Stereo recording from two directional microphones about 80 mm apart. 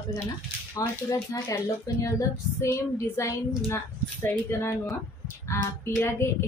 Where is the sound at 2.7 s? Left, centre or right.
Left.